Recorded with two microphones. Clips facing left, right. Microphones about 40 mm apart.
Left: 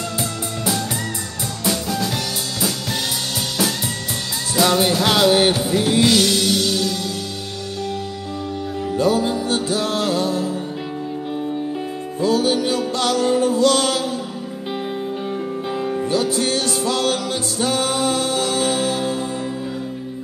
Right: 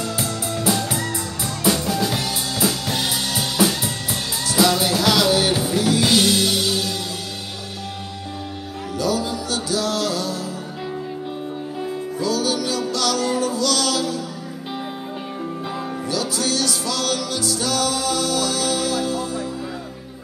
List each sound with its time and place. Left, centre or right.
0.2 s music: centre
4.6 s music: left
6.0 s music: centre
8.9 s music: left
12.2 s music: left
16.1 s music: left